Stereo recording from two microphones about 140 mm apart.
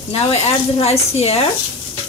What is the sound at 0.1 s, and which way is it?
Speech, 45° left (ahead or behind).